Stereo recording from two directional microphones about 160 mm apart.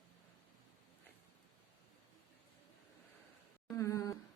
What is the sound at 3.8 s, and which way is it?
Speech, 20° left (ahead or behind).